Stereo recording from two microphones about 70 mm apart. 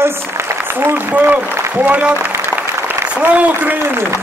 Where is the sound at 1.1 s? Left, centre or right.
Right.